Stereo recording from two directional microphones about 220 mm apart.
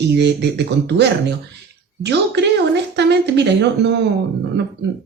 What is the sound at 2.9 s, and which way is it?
Speech, 50° right (ahead or behind).